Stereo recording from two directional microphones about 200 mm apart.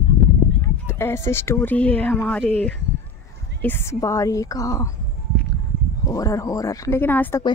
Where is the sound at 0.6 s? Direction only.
15° left (ahead or behind).